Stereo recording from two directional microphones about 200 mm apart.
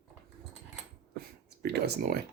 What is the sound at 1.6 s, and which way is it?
Speech, 55° right (ahead or behind).